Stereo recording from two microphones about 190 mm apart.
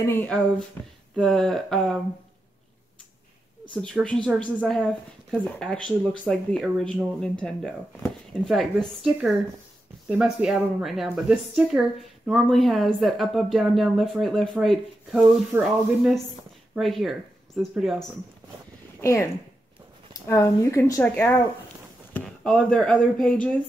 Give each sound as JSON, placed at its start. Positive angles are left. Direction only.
{"t": 0.0, "sound": "speech", "side_deg": 10}
{"t": 3.7, "sound": "speech", "side_deg": 5}
{"t": 18.9, "sound": "speech", "side_deg": 15}